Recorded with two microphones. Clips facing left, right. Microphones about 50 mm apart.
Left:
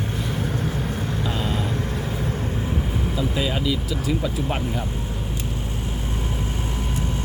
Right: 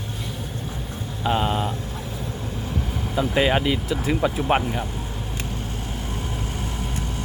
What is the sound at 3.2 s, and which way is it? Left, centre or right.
Speech, right.